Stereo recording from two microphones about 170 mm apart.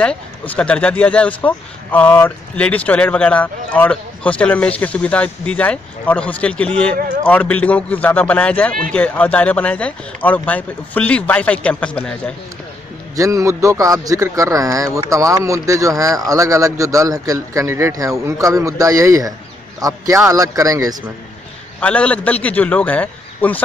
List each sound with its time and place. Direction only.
0.0 s speech: 5° left (ahead or behind)
13.1 s a man's voice: 20° right (ahead or behind)
21.7 s speech: 5° left (ahead or behind)